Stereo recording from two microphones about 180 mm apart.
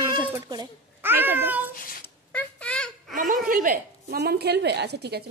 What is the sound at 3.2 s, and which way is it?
A woman's voice, 50° right (ahead or behind).